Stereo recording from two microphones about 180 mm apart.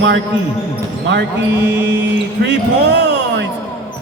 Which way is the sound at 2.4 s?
75° right (ahead or behind).